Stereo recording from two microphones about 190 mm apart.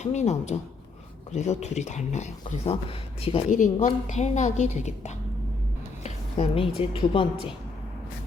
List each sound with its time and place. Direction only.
0.0 s a woman's voice: 35° left (ahead or behind)
3.5 s a woman's voice: 40° left (ahead or behind)